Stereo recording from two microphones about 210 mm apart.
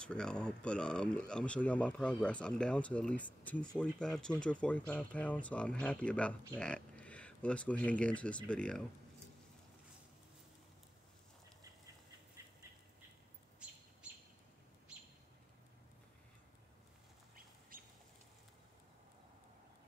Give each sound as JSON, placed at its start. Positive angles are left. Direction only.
{"t": 0.0, "sound": "speech", "side_deg": 5}
{"t": 13.6, "sound": "bird", "side_deg": -5}
{"t": 17.4, "sound": "duck", "side_deg": -40}